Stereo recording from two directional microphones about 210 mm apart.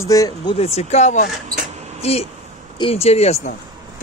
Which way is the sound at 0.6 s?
30° left (ahead or behind).